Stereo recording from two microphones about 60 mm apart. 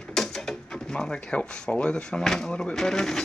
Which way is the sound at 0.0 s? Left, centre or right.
Centre.